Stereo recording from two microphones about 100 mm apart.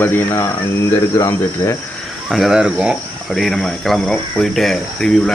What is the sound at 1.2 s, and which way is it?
Cricket, 30° left (ahead or behind).